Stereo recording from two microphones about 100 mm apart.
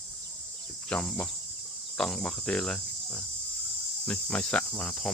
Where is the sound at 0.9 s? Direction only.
5° left (ahead or behind).